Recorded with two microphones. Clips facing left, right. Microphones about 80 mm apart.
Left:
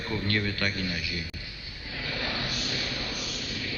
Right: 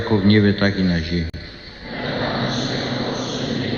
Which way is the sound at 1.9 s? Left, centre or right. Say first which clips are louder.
Right 11 dB; right.